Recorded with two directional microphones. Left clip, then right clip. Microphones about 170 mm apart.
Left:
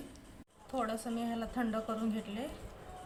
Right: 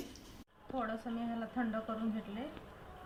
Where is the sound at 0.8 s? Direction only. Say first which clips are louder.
Left 3 dB; 15° left (ahead or behind).